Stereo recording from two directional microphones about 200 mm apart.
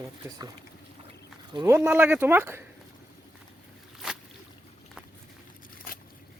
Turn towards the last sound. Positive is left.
turn(degrees=45)  # may be behind; listen again after turning